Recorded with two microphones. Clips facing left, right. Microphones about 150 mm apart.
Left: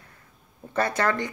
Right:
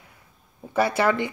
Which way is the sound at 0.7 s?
5° right (ahead or behind).